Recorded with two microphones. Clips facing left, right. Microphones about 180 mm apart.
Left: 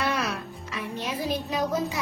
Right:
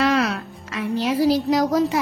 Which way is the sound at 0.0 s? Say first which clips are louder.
Right 8 dB; 75° right (ahead or behind).